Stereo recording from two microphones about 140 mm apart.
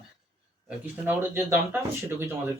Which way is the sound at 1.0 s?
15° right (ahead or behind).